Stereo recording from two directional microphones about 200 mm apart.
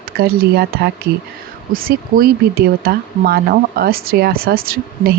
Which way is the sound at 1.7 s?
45° right (ahead or behind).